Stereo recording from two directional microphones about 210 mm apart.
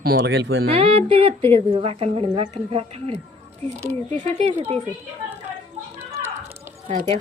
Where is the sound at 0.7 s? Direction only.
30° right (ahead or behind).